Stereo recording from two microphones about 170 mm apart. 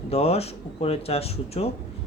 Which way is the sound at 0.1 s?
35° left (ahead or behind).